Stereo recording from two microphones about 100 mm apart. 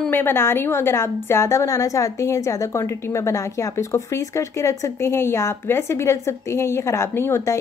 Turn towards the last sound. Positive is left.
turn(degrees=25)  # may be behind; listen again after turning